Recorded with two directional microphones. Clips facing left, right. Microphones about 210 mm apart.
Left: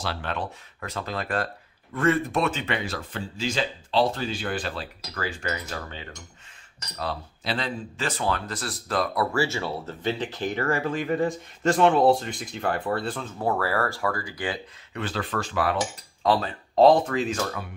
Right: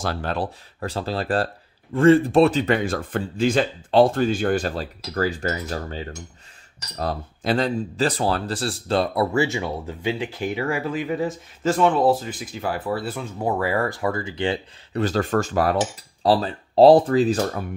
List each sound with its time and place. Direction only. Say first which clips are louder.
0.0 s cutlery: right 5 dB; 40° right (ahead or behind)
2.0 s speech: right 9 dB; 30° right (ahead or behind)
15.0 s cutlery: right 8 dB; 40° right (ahead or behind)